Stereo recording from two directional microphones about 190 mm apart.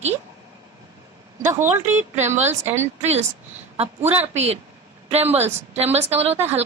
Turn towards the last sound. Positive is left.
turn(degrees=-35)  # may be behind; listen again after turning